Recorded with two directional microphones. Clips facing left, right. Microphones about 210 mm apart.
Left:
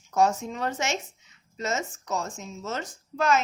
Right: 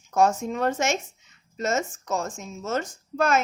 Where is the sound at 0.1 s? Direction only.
50° right (ahead or behind).